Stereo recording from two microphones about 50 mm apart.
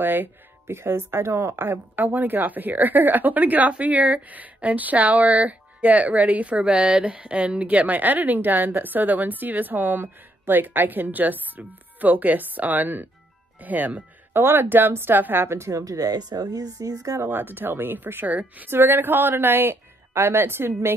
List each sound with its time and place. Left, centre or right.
0.0 s speech: right
1.6 s a woman's voice: right
14.3 s speech: right
17.3 s a woman's voice: right
18.7 s speech: right